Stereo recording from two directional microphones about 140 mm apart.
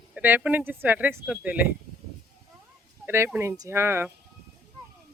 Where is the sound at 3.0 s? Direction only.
20° right (ahead or behind).